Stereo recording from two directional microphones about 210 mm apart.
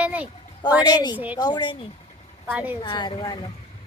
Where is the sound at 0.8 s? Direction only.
20° left (ahead or behind).